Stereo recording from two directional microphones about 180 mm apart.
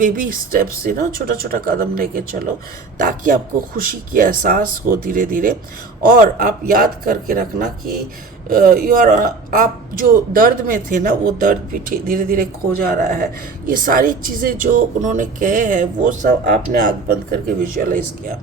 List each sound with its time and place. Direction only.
0.0 s speech: 50° right (ahead or behind)